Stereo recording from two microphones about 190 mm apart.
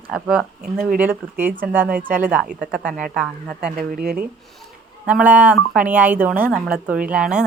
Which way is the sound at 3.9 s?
50° right (ahead or behind).